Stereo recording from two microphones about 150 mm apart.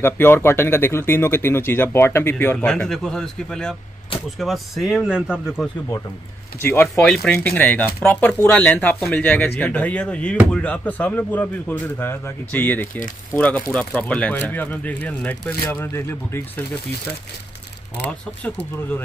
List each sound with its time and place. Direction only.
0.0 s speech: 15° left (ahead or behind); by 5.7 s 5° right (ahead or behind)
6.6 s speech: 15° left (ahead or behind)
7.0 s speech: 5° left (ahead or behind)